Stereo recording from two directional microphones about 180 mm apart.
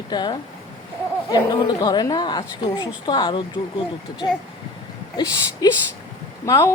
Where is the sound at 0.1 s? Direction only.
25° left (ahead or behind).